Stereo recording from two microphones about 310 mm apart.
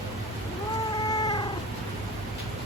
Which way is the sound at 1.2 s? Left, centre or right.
Centre.